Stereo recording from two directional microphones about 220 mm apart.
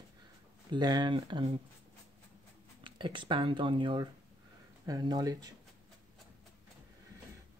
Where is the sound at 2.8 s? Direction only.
20° right (ahead or behind).